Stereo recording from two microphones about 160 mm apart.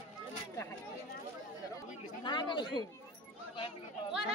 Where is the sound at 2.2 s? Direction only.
30° left (ahead or behind).